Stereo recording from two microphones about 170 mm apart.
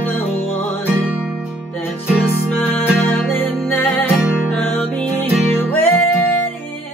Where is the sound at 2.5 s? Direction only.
10° left (ahead or behind).